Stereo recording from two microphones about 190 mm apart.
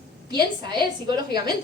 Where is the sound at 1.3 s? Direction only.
20° right (ahead or behind).